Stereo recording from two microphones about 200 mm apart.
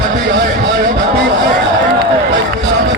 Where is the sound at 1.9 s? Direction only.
60° right (ahead or behind).